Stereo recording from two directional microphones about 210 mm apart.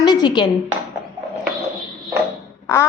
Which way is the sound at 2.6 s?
15° left (ahead or behind).